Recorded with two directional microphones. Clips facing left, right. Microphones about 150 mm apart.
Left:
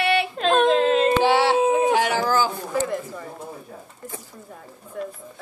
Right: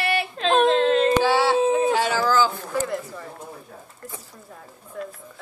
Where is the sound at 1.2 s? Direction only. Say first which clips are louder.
Left 1 dB; 20° left (ahead or behind).